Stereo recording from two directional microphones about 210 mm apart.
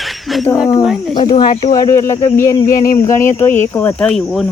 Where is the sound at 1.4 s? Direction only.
25° left (ahead or behind).